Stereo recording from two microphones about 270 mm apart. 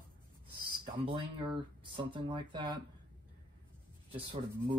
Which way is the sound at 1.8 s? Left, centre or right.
Centre.